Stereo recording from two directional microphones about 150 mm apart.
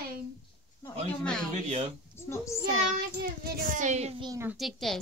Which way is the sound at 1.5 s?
50° right (ahead or behind).